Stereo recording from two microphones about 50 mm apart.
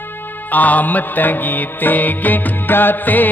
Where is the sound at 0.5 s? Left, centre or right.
Left.